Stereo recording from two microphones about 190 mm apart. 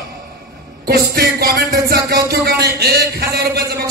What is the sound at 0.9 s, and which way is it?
Music, 55° right (ahead or behind).